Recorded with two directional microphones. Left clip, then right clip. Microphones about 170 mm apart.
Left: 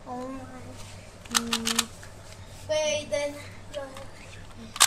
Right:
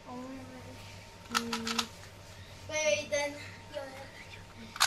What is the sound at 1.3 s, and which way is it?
Typing, centre (ahead or behind).